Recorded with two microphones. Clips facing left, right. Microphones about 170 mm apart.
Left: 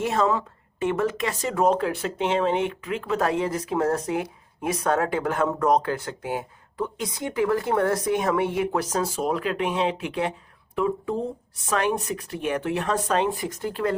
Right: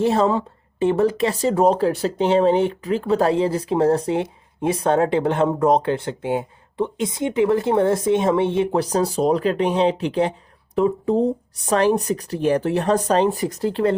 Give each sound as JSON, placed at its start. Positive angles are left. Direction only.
{"t": 0.0, "sound": "speech", "side_deg": -30}